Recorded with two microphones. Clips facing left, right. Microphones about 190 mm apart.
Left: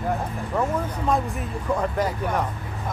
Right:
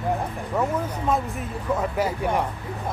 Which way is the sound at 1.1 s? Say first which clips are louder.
Left 1 dB; centre (ahead or behind).